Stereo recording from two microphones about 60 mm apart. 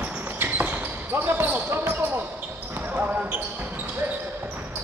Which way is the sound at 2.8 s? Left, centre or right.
Right.